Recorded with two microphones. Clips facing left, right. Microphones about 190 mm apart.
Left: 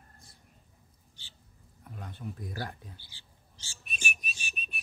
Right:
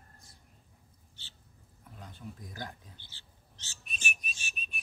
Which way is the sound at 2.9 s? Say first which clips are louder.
Left 2 dB; 10° left (ahead or behind).